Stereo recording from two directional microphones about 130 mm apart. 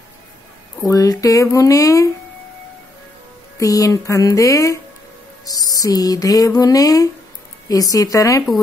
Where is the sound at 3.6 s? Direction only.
25° left (ahead or behind).